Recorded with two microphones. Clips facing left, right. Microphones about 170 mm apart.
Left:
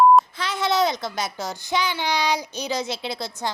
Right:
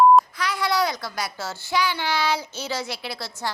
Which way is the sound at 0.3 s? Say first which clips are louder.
Left 2 dB; 25° left (ahead or behind).